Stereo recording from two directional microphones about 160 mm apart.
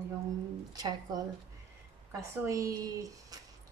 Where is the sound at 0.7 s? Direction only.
25° right (ahead or behind).